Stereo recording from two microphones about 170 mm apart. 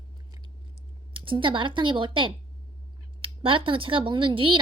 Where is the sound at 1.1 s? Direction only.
30° right (ahead or behind).